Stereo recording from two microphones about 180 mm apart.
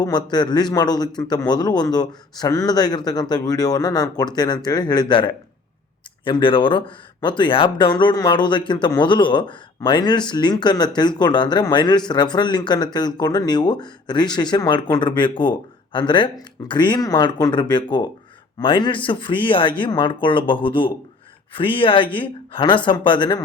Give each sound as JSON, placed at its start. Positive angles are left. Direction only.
{"t": 0.0, "sound": "speech", "side_deg": 25}